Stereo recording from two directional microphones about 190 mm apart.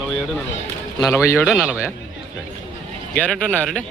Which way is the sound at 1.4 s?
Centre (ahead or behind).